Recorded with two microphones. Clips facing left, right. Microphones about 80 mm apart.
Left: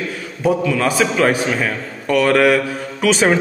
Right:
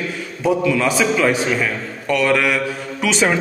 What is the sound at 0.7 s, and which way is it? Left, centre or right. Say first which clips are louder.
A man's voice: even; left.